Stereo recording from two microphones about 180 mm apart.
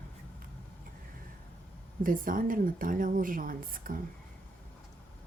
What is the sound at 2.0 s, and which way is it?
A woman's voice, 50° right (ahead or behind).